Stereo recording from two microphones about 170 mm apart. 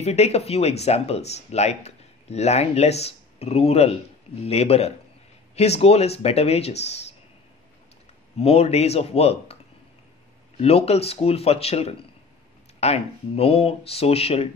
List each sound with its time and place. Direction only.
0.0 s speech: 40° left (ahead or behind)
8.4 s speech: 35° left (ahead or behind)
10.6 s speech: 35° left (ahead or behind)